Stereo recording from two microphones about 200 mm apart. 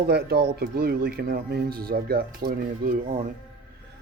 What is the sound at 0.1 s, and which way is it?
Speech, 50° right (ahead or behind).